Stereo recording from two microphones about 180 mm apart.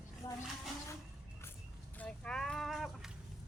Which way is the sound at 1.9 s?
5° left (ahead or behind).